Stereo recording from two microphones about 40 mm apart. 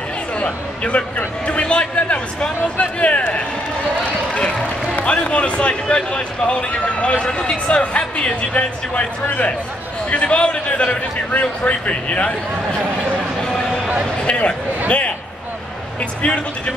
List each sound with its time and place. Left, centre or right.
0.4 s a man's voice: left
4.3 s a man's voice: left
16.2 s speech: left